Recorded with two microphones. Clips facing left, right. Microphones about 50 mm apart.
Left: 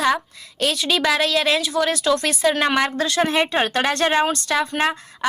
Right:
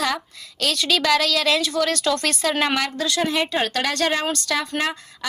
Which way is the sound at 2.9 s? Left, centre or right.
Left.